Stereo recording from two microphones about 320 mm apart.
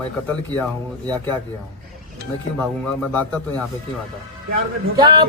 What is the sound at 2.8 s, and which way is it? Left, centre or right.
Speech, centre.